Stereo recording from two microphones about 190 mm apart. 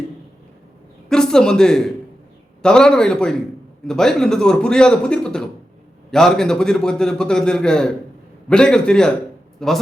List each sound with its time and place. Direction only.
1.1 s a man's voice: 5° left (ahead or behind)